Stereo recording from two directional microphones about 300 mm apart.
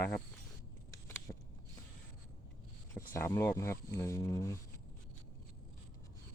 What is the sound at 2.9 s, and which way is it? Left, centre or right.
Speech, centre.